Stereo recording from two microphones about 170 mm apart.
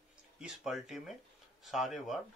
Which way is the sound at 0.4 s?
Centre (ahead or behind).